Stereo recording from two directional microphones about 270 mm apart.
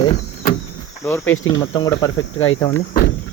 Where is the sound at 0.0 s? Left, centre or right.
Left.